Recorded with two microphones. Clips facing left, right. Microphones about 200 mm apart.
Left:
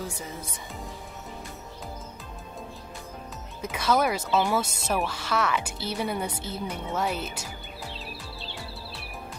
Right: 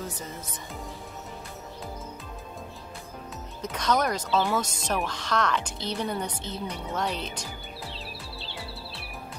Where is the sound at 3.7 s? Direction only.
5° left (ahead or behind).